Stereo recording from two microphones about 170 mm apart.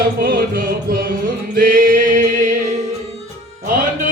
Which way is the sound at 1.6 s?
55° right (ahead or behind).